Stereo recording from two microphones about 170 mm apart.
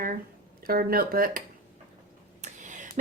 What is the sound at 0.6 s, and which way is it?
Speech, 60° right (ahead or behind).